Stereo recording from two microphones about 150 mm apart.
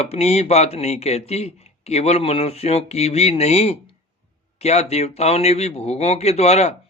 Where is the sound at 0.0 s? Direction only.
45° left (ahead or behind).